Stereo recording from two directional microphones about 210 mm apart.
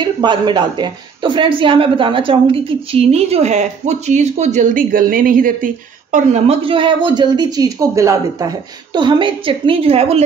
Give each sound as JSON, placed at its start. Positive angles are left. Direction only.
{"t": 0.0, "sound": "a woman's voice", "side_deg": -20}